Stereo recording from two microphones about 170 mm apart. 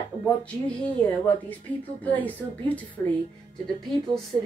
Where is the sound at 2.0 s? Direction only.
10° left (ahead or behind).